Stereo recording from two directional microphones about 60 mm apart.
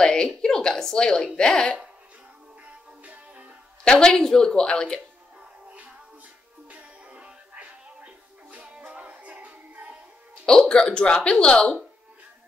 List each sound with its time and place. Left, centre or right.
0.0 s a woman's voice: centre
2.6 s music: right
3.8 s speech: centre
5.7 s music: right
10.4 s speech: centre